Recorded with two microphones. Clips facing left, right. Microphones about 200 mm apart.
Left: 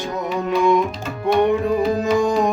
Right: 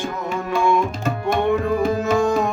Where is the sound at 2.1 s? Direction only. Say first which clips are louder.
Left 1 dB; 15° left (ahead or behind).